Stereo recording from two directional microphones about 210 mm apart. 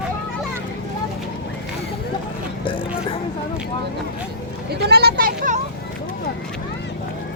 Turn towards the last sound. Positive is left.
turn(degrees=-40)  # may be behind; listen again after turning